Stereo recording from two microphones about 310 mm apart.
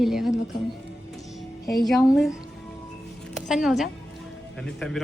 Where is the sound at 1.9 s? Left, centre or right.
Centre.